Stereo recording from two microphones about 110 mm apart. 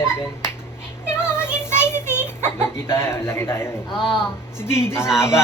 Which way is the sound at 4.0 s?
55° left (ahead or behind).